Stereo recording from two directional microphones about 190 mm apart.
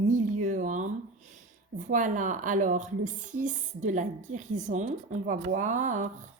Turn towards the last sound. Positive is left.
turn(degrees=-40)  # may be behind; listen again after turning